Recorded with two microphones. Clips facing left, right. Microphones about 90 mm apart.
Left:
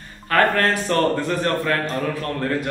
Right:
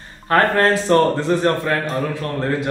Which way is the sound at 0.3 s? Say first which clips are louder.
Right 3 dB; 25° right (ahead or behind).